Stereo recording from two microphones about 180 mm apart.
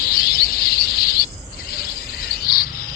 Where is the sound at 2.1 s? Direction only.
60° left (ahead or behind).